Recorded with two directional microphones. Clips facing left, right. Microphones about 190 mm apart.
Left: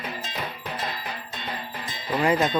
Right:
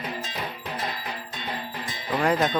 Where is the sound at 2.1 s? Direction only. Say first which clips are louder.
Left 1 dB; centre (ahead or behind).